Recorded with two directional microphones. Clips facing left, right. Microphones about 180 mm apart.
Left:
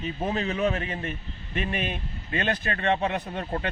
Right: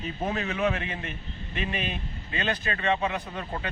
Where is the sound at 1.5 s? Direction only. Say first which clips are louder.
Left 2 dB; 50° left (ahead or behind).